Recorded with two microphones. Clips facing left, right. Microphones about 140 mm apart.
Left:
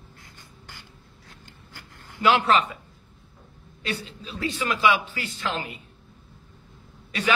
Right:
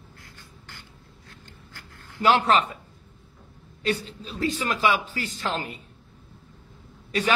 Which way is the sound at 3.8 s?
40° right (ahead or behind).